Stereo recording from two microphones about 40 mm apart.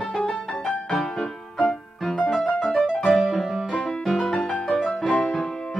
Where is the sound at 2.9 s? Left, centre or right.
Centre.